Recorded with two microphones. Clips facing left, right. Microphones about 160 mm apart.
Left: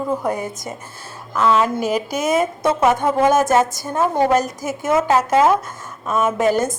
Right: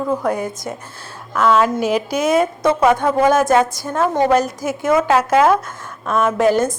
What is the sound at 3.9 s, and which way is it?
Speech, 10° left (ahead or behind).